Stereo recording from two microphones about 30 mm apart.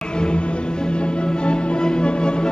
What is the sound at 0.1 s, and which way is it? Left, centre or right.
Music, left.